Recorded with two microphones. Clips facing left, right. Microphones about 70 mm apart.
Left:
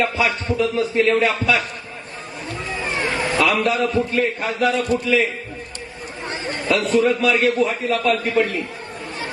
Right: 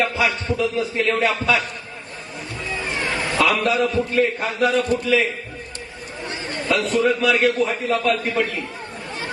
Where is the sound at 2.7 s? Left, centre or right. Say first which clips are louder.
Left 1 dB; left.